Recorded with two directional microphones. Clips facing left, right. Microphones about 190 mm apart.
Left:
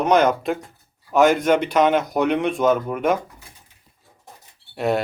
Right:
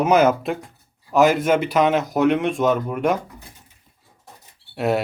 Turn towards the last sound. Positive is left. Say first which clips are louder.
# even
turn(degrees=0)  # may be behind; listen again after turning